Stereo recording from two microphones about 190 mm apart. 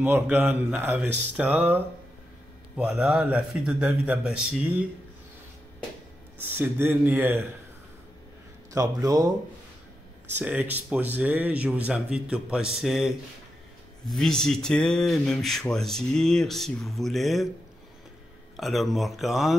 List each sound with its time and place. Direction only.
0.0 s speech: 10° right (ahead or behind)
6.5 s speech: 10° right (ahead or behind)
8.7 s a man's voice: 20° right (ahead or behind); by 17.5 s centre (ahead or behind)
18.6 s speech: centre (ahead or behind)